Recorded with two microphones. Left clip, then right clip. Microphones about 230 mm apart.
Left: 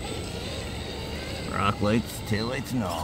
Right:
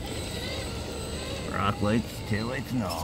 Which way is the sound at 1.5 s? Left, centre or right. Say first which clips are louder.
Left 2 dB; centre.